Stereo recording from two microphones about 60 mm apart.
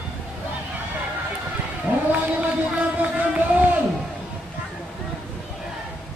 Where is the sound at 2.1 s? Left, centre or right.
Right.